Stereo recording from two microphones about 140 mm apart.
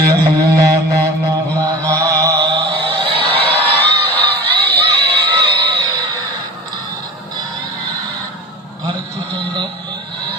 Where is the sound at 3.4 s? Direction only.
10° left (ahead or behind).